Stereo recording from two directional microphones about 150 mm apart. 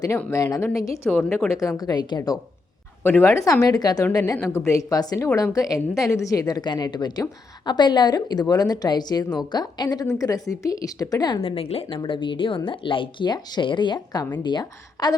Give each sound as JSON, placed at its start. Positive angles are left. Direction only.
{"t": 0.2, "sound": "a woman's voice", "side_deg": 15}
{"t": 1.1, "sound": "speech", "side_deg": 0}
{"t": 1.5, "sound": "a woman's voice", "side_deg": 20}
{"t": 3.0, "sound": "a woman's voice", "side_deg": 15}
{"t": 11.3, "sound": "a woman's voice", "side_deg": 40}